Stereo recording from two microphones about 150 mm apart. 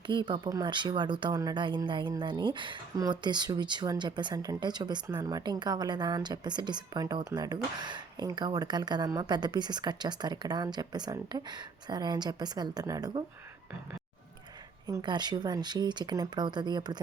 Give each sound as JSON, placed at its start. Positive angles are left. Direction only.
{"t": 0.1, "sound": "speech", "side_deg": -30}
{"t": 14.8, "sound": "speech", "side_deg": -25}